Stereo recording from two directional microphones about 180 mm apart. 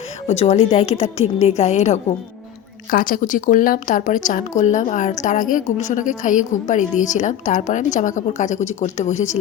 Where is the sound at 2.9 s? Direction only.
50° left (ahead or behind).